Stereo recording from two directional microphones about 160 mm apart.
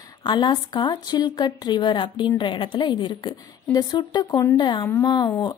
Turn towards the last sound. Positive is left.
turn(degrees=25)  # may be behind; listen again after turning